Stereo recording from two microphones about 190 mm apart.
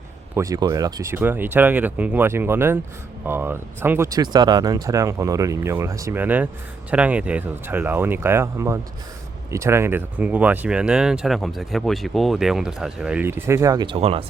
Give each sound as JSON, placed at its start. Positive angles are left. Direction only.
{"t": 0.3, "sound": "speech", "side_deg": -15}